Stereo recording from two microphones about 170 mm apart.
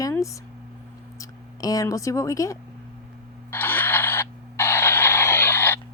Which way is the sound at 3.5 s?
10° left (ahead or behind).